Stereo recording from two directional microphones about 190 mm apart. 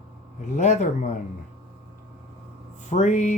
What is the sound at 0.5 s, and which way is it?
Speech, 40° left (ahead or behind).